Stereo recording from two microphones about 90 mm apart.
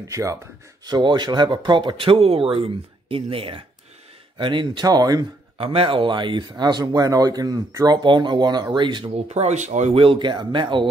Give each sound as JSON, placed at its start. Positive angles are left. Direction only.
{"t": 0.1, "sound": "speech", "side_deg": -35}
{"t": 0.8, "sound": "speech", "side_deg": -55}
{"t": 4.4, "sound": "speech", "side_deg": -65}
{"t": 4.8, "sound": "speech", "side_deg": -45}
{"t": 5.6, "sound": "speech", "side_deg": -90}
{"t": 9.9, "sound": "speech", "side_deg": -75}